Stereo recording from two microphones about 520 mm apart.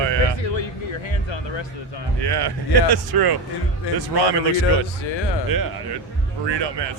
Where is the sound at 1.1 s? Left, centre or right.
Left.